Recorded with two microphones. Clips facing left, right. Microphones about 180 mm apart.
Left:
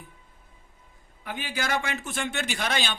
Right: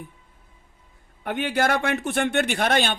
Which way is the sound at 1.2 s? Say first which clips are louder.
Right 9 dB; 60° right (ahead or behind).